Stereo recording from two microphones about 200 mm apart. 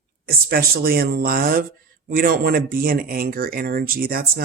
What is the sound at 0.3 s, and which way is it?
Speech, 50° right (ahead or behind).